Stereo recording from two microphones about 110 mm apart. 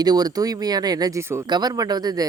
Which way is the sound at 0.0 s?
35° right (ahead or behind).